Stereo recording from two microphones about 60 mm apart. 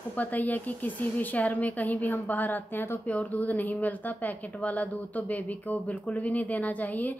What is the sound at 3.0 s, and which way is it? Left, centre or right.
Speech, left.